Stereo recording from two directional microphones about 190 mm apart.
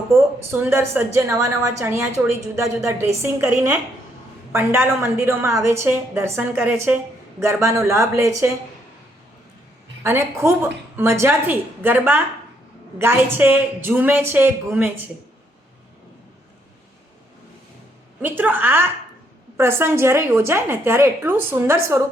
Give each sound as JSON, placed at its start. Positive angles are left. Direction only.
{"t": 0.1, "sound": "a woman's voice", "side_deg": -10}
{"t": 4.5, "sound": "a woman's voice", "side_deg": -10}
{"t": 10.0, "sound": "a woman's voice", "side_deg": -15}
{"t": 18.2, "sound": "a woman's voice", "side_deg": -10}